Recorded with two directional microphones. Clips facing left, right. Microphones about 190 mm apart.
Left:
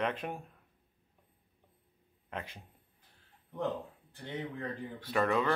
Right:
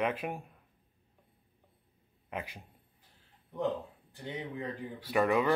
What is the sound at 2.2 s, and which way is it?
Speech, 10° right (ahead or behind).